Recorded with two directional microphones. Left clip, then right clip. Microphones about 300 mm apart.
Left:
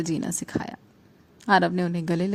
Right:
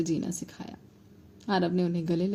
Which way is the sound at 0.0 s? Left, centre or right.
Left.